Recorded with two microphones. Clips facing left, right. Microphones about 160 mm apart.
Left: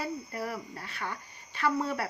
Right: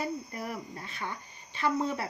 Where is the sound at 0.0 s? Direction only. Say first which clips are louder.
Even; 15° right (ahead or behind).